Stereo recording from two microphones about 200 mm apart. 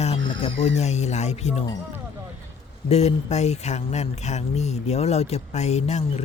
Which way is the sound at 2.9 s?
30° left (ahead or behind).